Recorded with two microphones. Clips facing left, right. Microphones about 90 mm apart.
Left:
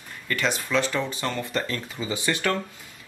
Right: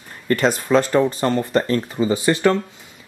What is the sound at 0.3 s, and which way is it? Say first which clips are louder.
Speech: right 9 dB; 40° right (ahead or behind).